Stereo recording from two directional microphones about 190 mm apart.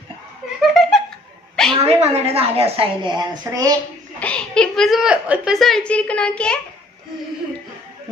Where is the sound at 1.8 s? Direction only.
30° right (ahead or behind).